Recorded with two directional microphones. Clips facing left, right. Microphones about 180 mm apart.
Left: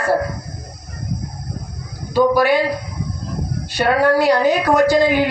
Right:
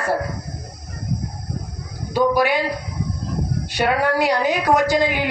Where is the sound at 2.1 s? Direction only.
15° right (ahead or behind).